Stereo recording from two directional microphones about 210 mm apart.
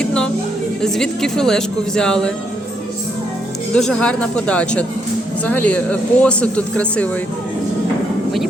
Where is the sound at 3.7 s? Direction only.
5° left (ahead or behind).